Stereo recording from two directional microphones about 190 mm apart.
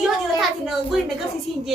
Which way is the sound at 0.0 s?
Centre (ahead or behind).